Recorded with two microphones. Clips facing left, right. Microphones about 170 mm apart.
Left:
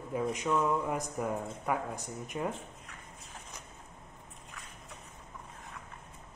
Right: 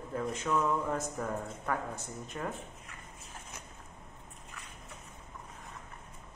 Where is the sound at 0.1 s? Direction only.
15° left (ahead or behind).